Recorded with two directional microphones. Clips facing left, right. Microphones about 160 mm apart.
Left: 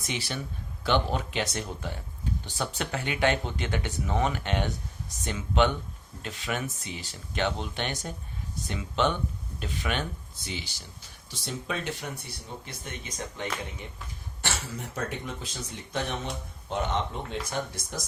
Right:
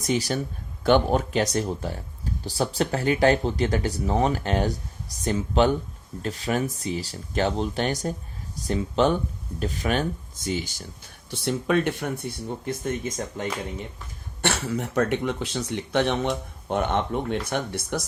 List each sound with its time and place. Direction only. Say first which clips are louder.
0.0 s speech: right 9 dB; 40° right (ahead or behind)
14.4 s speech: right 9 dB; 65° right (ahead or behind)